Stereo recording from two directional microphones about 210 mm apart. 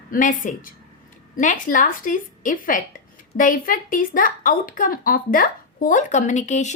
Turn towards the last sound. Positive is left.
turn(degrees=35)  # may be behind; listen again after turning